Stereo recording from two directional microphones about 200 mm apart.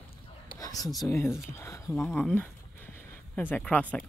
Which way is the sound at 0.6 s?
20° left (ahead or behind).